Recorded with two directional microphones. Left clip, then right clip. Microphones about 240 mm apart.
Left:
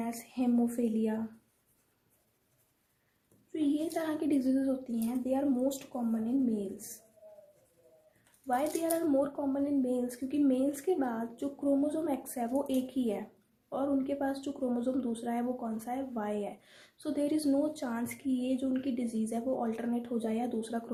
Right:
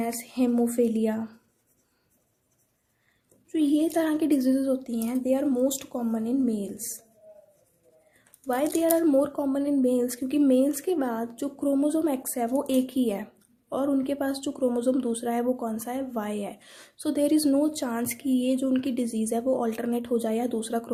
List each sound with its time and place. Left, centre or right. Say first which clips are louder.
0.0 s a sound: right 7 dB; right
3.9 s speech: right 8 dB; right
8.4 s speech: right 7 dB; right